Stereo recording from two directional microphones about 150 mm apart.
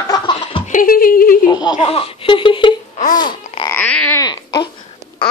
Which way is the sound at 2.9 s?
55° left (ahead or behind).